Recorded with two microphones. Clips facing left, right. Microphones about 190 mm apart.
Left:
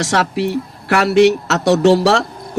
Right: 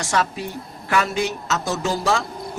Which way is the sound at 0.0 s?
75° left (ahead or behind).